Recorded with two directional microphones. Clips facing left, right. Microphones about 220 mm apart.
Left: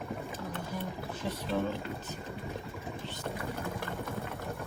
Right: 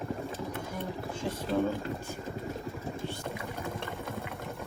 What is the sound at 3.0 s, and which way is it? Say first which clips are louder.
Boat: right 2 dB; 10° right (ahead or behind).